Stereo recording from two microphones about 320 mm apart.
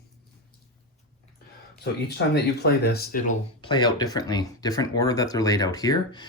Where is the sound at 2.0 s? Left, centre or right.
Left; by 6.2 s centre.